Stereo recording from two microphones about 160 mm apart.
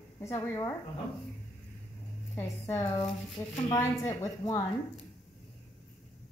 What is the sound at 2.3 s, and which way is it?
A woman's voice, 15° left (ahead or behind).